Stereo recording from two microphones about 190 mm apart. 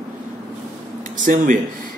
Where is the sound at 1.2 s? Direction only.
45° right (ahead or behind).